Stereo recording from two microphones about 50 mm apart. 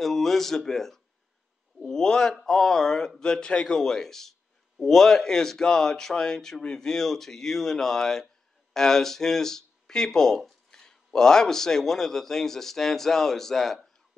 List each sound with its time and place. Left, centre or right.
0.0 s speech: centre